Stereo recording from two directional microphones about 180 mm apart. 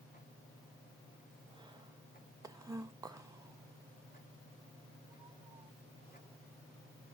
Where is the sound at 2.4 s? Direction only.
20° right (ahead or behind).